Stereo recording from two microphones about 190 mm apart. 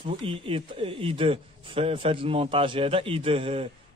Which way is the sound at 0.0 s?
30° right (ahead or behind).